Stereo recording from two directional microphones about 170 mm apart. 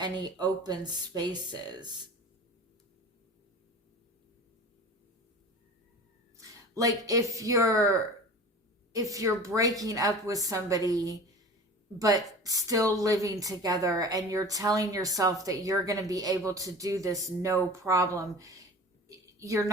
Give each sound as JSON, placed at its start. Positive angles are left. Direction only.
{"t": 0.0, "sound": "a woman's voice", "side_deg": -25}
{"t": 6.3, "sound": "a woman's voice", "side_deg": -20}
{"t": 19.0, "sound": "a sound", "side_deg": -20}